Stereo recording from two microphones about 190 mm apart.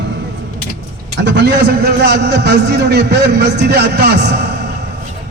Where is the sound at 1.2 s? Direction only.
65° right (ahead or behind).